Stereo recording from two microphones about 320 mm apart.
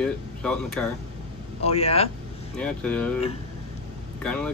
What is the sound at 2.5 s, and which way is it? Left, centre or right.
Speech, centre.